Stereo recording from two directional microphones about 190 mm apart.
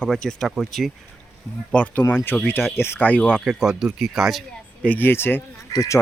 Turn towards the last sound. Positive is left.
turn(degrees=15)  # may be behind; listen again after turning